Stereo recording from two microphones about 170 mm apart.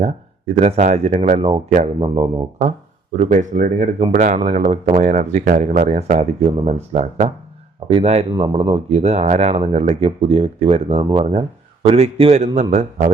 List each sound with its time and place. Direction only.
0.0 s a man's voice: 40° right (ahead or behind)
2.6 s speech: 45° right (ahead or behind)